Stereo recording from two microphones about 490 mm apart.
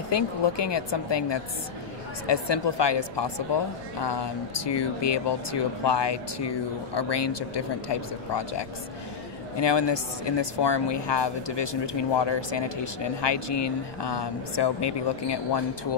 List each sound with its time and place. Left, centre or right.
0.1 s speech: left